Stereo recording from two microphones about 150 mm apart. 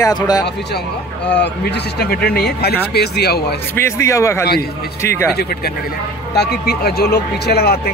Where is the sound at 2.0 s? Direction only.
90° left.